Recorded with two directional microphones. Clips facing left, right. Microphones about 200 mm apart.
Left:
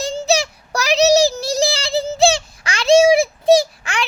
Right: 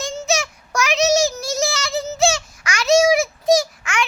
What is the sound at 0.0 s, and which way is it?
Child singing, 35° left (ahead or behind).